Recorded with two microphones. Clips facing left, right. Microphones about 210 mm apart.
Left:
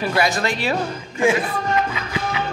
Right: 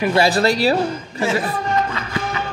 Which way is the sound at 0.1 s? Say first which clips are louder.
Right 6 dB; 30° right (ahead or behind).